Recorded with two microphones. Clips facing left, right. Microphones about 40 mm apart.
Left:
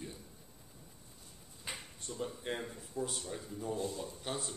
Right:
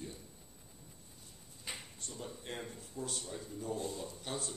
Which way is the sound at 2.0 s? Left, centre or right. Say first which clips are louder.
Left 5 dB; centre.